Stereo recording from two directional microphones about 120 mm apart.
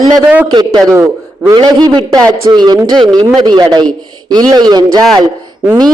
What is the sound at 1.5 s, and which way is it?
A man's voice, 40° right (ahead or behind).